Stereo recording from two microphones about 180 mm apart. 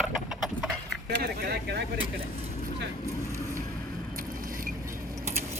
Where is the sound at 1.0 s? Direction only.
65° right (ahead or behind).